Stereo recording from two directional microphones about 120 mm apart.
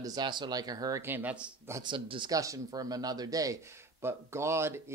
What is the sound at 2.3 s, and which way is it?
Speech, 30° right (ahead or behind).